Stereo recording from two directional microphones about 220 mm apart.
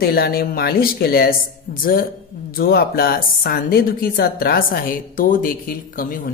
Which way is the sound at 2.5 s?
45° left (ahead or behind).